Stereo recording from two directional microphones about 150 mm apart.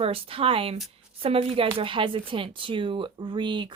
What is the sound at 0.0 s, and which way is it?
Speech, 40° right (ahead or behind).